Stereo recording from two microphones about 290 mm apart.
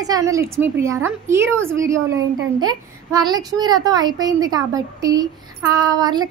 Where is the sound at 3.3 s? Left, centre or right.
Centre.